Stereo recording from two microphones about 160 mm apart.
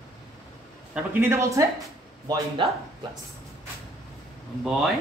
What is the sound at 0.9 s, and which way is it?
A man's voice, 15° right (ahead or behind).